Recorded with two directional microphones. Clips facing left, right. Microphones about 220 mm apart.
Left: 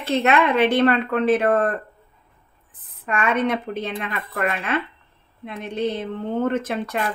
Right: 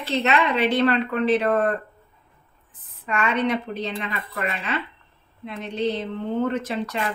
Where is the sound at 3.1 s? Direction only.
50° left (ahead or behind).